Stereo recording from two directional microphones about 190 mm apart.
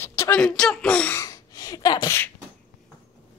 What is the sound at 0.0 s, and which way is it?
Speech, 15° left (ahead or behind).